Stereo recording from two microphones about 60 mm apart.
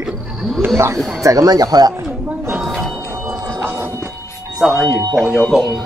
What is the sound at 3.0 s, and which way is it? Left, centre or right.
Printer, right.